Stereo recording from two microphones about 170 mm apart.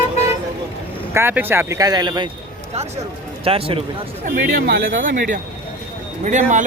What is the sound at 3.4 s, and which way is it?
Speech, 35° right (ahead or behind).